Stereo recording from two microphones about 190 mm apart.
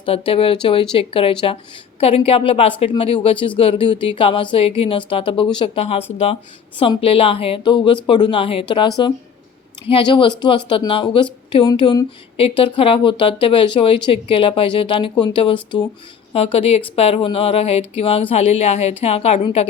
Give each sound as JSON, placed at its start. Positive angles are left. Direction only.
{"t": 0.0, "sound": "a woman's voice", "side_deg": 30}
{"t": 9.9, "sound": "a woman's voice", "side_deg": 25}